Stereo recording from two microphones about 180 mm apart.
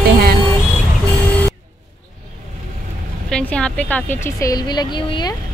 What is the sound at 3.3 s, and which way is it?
A woman's voice, 5° left (ahead or behind).